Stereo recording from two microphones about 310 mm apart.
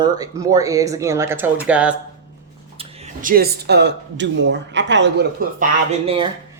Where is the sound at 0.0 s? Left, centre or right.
Centre.